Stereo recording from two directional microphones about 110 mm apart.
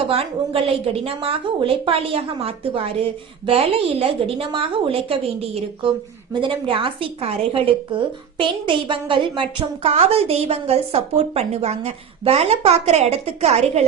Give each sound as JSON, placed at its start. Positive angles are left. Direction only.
{"t": 0.1, "sound": "a woman's voice", "side_deg": -65}
{"t": 6.3, "sound": "a woman's voice", "side_deg": -50}
{"t": 9.8, "sound": "a woman's voice", "side_deg": -75}